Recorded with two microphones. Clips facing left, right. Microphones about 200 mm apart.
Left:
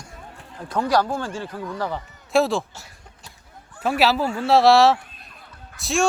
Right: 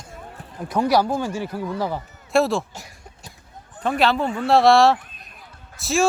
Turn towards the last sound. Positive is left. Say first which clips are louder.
# right 2 dB
turn(degrees=0)  # may be behind; listen again after turning